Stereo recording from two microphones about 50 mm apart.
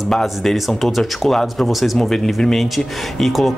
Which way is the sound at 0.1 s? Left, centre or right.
Centre.